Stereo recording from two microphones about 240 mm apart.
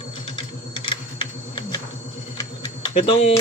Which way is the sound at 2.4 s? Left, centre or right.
Centre.